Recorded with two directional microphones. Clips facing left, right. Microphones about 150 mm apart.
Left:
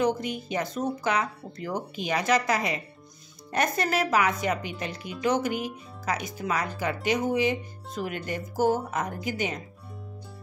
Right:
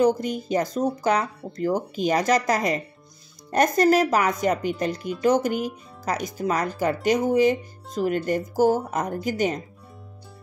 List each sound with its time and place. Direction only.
0.0 s speech: 40° right (ahead or behind)